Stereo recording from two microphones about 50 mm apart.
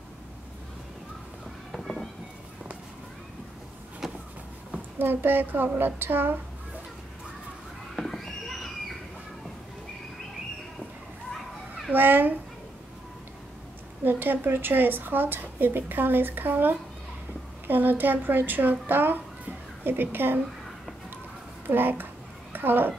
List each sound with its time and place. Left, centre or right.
1.7 s music: centre
4.0 s vehicle: centre
4.9 s a woman's voice: right
7.9 s a sound: centre
11.9 s a woman's voice: right
14.0 s a woman's voice: right
21.6 s a woman's voice: right